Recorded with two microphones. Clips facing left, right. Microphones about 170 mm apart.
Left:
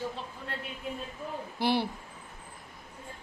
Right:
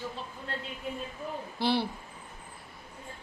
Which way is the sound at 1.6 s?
15° left (ahead or behind).